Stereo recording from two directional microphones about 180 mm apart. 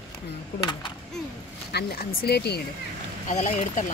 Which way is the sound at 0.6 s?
25° left (ahead or behind).